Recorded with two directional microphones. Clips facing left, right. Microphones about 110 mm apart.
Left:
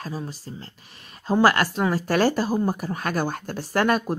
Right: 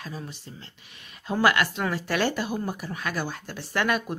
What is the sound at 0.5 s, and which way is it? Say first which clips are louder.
Speech: left 6 dB; 35° left (ahead or behind).